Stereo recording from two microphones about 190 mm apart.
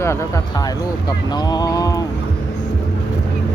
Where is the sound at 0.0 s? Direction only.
15° left (ahead or behind).